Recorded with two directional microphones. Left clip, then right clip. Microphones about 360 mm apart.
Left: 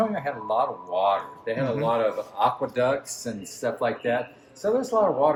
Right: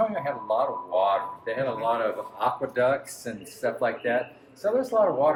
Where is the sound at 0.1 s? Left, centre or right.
Left.